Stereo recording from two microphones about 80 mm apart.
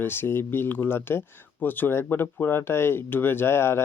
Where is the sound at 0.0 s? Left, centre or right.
Left.